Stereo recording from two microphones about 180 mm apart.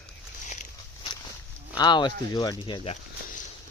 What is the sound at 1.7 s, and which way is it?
Speech, 25° left (ahead or behind).